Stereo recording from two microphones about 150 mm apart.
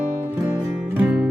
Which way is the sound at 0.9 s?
10° right (ahead or behind).